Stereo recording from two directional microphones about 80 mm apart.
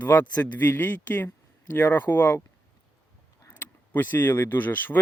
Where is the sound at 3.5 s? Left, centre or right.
Left.